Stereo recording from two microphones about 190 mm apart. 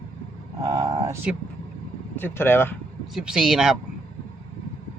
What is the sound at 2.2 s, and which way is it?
Speech, 10° left (ahead or behind).